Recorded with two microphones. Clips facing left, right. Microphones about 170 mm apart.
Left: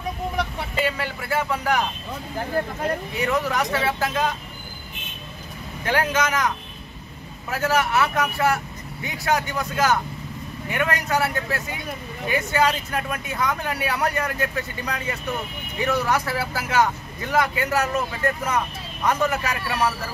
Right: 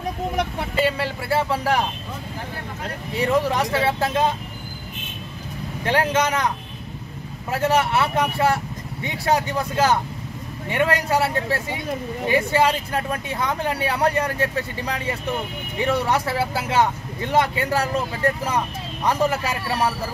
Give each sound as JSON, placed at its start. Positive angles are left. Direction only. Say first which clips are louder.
{"t": 0.8, "sound": "speech", "louder": "right 3 dB", "side_deg": -30}
{"t": 3.2, "sound": "speech", "louder": "right 5 dB", "side_deg": -30}
{"t": 5.9, "sound": "a man's voice", "louder": "right 2 dB", "side_deg": -30}
{"t": 7.5, "sound": "a man's voice", "louder": "right 2 dB", "side_deg": -30}